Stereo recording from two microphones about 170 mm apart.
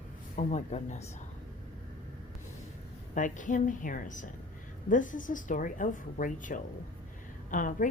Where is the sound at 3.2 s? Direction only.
50° left (ahead or behind).